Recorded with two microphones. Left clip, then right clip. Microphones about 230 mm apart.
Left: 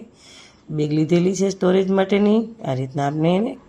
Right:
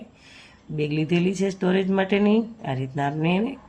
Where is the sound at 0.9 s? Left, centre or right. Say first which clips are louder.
Left 6 dB; centre.